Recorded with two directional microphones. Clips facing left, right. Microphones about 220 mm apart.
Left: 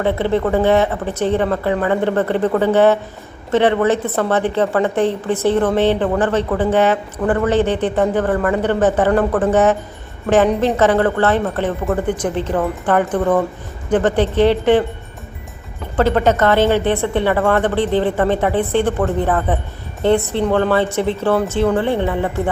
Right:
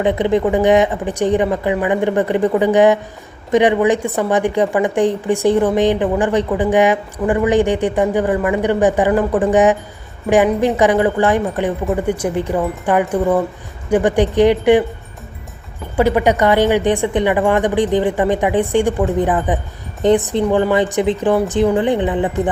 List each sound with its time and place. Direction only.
0.0 s speech: 15° right (ahead or behind)
16.0 s speech: 10° right (ahead or behind)